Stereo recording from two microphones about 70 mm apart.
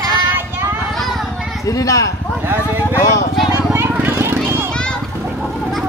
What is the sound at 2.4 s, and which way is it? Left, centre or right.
Vehicle, right.